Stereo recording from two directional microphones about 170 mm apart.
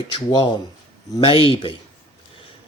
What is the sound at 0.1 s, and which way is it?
Speech, 25° left (ahead or behind).